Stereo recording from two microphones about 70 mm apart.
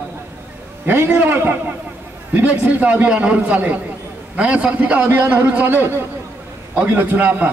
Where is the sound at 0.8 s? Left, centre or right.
Right.